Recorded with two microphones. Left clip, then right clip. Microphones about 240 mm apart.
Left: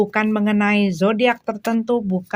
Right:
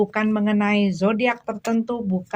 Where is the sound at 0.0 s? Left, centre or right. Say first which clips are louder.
Left 3 dB; left.